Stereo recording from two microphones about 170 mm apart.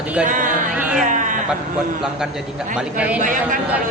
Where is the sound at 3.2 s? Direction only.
50° right (ahead or behind).